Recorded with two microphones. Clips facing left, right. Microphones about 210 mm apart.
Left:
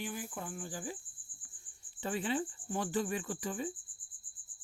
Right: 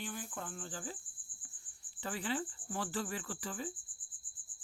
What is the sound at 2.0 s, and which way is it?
Speech, 20° left (ahead or behind).